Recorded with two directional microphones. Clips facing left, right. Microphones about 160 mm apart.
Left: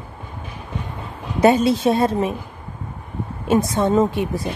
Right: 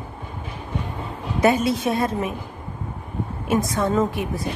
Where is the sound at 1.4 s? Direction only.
30° left (ahead or behind).